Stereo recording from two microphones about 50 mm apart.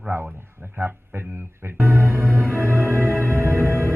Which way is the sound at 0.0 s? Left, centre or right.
Centre.